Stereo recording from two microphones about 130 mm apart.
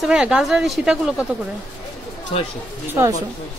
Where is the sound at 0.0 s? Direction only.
5° right (ahead or behind).